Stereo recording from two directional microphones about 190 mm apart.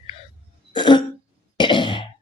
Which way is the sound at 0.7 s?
25° left (ahead or behind).